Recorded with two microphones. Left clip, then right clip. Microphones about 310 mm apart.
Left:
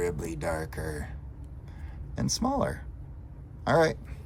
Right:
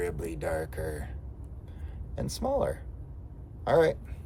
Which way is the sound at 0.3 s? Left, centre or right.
Centre.